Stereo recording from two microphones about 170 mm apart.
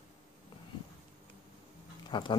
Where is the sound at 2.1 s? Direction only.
25° left (ahead or behind).